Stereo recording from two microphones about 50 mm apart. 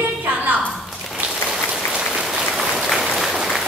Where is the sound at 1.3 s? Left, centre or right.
Centre.